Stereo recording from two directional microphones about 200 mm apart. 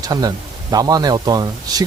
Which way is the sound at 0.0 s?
20° right (ahead or behind).